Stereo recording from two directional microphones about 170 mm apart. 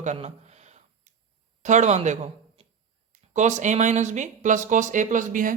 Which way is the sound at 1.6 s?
45° right (ahead or behind).